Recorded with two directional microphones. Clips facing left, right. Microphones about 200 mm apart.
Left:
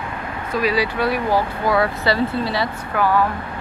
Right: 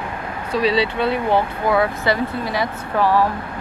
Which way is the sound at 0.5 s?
30° right (ahead or behind).